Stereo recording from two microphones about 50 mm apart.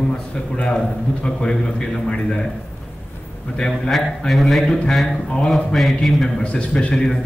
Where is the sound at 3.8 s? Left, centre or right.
Centre.